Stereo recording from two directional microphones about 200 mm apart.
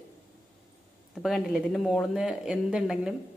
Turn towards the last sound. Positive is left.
turn(degrees=-5)  # may be behind; listen again after turning